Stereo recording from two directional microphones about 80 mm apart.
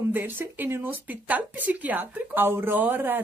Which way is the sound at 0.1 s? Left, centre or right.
Right.